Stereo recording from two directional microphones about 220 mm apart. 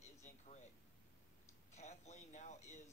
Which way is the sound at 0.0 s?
30° left (ahead or behind).